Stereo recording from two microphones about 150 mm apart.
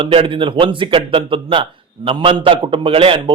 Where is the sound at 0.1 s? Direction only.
35° right (ahead or behind).